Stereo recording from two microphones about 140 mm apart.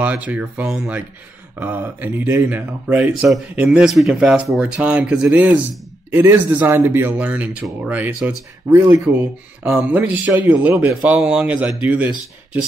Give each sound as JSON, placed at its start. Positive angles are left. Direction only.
{"t": 0.0, "sound": "speech", "side_deg": -10}